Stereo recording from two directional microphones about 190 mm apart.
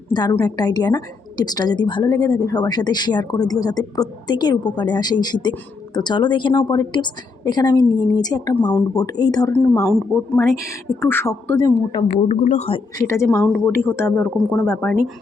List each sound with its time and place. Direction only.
0.1 s a woman's voice: 20° left (ahead or behind)
12.0 s a woman's voice: 35° left (ahead or behind)
13.5 s speech: 10° left (ahead or behind)